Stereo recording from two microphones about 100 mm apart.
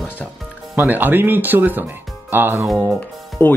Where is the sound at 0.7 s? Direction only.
20° right (ahead or behind).